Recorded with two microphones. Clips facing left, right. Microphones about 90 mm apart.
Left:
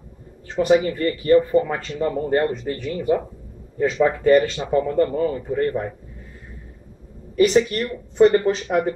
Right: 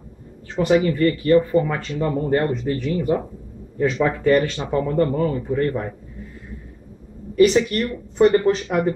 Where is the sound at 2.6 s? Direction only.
5° right (ahead or behind).